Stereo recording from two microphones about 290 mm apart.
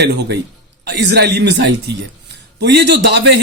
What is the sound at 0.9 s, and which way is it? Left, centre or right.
A man's voice, right.